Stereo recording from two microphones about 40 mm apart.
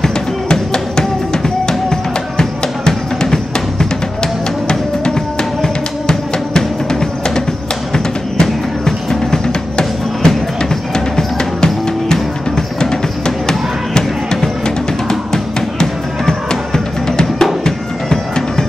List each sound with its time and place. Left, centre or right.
0.0 s music: centre
5.6 s music: centre